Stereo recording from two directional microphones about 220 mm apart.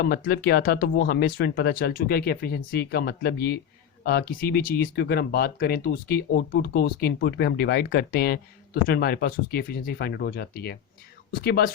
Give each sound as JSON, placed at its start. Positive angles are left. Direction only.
{"t": 0.0, "sound": "speech", "side_deg": 45}